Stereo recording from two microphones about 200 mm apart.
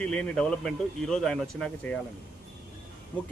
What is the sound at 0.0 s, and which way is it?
Speech, 5° left (ahead or behind).